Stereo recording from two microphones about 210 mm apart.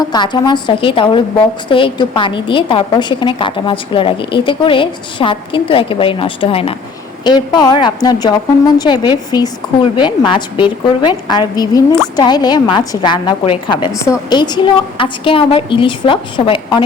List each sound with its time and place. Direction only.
0.0 s a woman's voice: 20° left (ahead or behind)